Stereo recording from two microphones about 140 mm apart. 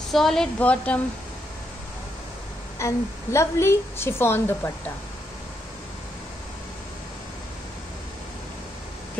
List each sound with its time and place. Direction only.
0.1 s a woman's voice: 5° left (ahead or behind)
2.8 s a woman's voice: 20° left (ahead or behind)